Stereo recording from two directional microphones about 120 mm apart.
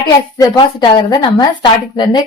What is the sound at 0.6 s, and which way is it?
Speech, 35° left (ahead or behind).